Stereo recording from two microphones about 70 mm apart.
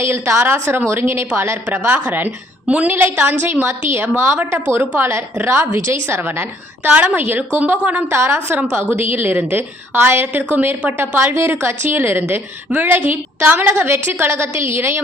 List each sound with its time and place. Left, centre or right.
0.0 s a woman's voice: right
1.6 s a woman's voice: right
8.1 s a woman's voice: right